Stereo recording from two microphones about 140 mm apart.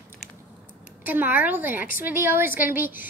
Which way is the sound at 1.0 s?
15° right (ahead or behind).